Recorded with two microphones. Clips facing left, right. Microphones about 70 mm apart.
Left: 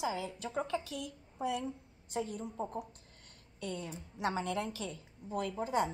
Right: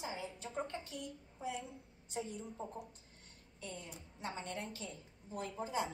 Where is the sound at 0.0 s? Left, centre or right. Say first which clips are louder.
Left 7 dB; left.